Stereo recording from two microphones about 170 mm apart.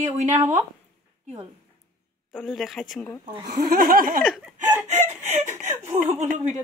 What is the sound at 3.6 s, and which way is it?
Laughter, 55° right (ahead or behind).